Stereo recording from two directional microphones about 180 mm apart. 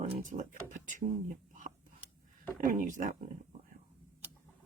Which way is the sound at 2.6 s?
45° right (ahead or behind).